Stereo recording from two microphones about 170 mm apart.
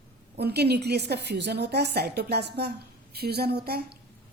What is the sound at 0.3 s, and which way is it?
A woman's voice, 75° right (ahead or behind).